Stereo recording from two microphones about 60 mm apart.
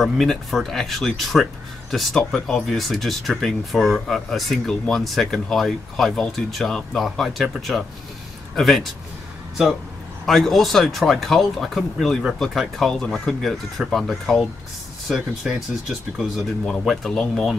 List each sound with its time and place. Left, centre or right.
0.0 s speech: centre
7.7 s speech: centre
8.5 s speech: centre
10.2 s speech: centre
15.1 s speech: centre
17.2 s speech: centre